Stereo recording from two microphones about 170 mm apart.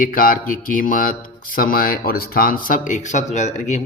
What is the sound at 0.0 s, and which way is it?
Speech, 55° left (ahead or behind).